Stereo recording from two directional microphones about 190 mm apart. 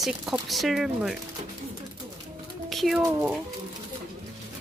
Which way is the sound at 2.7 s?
Centre (ahead or behind).